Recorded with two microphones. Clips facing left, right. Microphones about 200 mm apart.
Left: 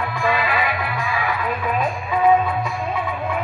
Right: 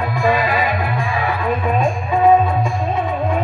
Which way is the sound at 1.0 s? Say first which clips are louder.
Right 3 dB; 25° right (ahead or behind).